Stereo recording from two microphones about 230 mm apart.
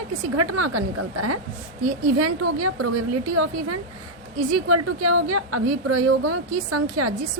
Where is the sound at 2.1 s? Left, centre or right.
Right.